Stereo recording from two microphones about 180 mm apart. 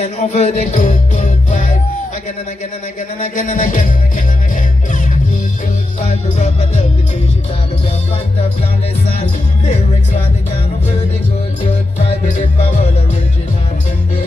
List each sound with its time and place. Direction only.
0.0 s music: 40° left (ahead or behind)
3.2 s music: 45° left (ahead or behind)
6.3 s music: 40° left (ahead or behind)